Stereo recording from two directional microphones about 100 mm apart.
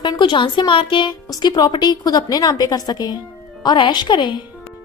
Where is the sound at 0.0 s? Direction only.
50° left (ahead or behind).